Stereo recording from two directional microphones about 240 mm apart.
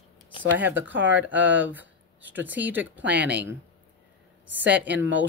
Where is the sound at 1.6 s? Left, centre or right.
Centre.